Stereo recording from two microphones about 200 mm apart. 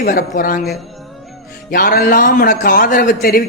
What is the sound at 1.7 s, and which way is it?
A man's voice, 50° left (ahead or behind).